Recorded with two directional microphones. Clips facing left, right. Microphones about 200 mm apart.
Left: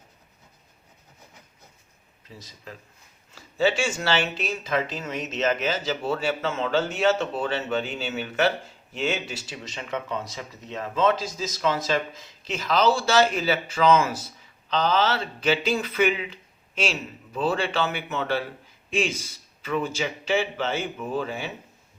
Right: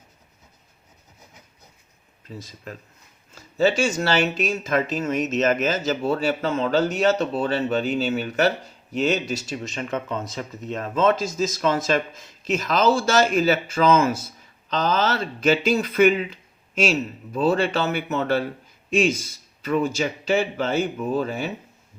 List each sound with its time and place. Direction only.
2.4 s speech: 50° right (ahead or behind)